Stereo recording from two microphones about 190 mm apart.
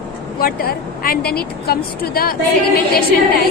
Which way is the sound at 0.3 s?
50° left (ahead or behind).